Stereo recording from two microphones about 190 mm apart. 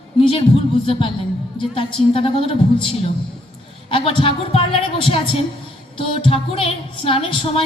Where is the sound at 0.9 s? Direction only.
30° left (ahead or behind).